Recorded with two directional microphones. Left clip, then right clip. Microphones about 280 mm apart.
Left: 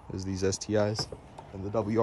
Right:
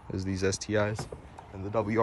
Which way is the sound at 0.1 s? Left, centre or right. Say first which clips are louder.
Right 1 dB; centre.